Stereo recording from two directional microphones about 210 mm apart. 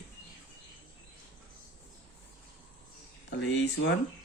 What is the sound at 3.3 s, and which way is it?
Speech, 60° left (ahead or behind).